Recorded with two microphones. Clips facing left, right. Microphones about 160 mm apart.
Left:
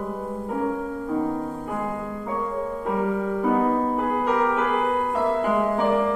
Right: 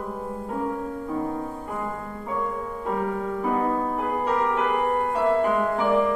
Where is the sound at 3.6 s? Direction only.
20° left (ahead or behind).